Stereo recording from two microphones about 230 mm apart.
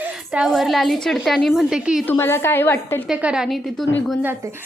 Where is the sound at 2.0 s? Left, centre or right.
Centre.